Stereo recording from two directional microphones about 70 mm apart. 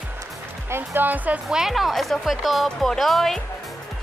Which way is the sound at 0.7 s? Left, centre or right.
Right.